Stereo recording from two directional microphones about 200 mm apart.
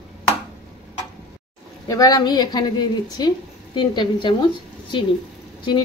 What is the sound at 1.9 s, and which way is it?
A woman's voice, 20° left (ahead or behind).